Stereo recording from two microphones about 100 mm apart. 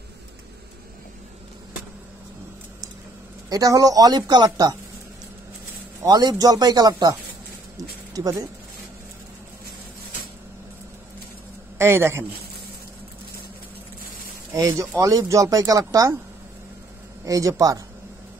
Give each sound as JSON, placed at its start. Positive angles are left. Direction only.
{"t": 3.4, "sound": "speech", "side_deg": -35}
{"t": 6.0, "sound": "speech", "side_deg": -40}
{"t": 11.8, "sound": "a man's voice", "side_deg": -25}
{"t": 14.6, "sound": "speech", "side_deg": -30}
{"t": 17.2, "sound": "speech", "side_deg": -35}